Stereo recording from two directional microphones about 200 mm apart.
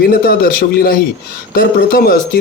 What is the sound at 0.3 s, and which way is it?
Speech, 50° left (ahead or behind).